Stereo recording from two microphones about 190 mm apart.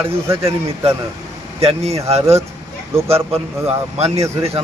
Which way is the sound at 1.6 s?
30° right (ahead or behind).